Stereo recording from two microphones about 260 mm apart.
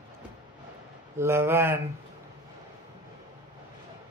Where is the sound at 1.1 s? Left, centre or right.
Centre.